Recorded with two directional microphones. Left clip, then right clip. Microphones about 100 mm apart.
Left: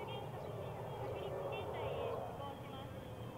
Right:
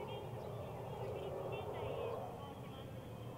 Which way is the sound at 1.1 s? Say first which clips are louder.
Left 2 dB; 30° left (ahead or behind).